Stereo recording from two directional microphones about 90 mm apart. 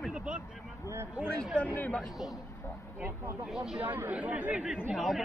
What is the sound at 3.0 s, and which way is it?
Speech, 25° right (ahead or behind).